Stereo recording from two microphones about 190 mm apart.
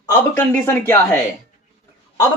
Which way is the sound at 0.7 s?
10° left (ahead or behind).